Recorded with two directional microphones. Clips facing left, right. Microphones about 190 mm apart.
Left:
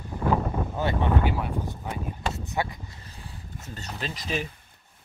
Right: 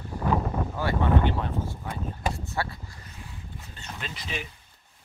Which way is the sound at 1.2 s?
10° left (ahead or behind).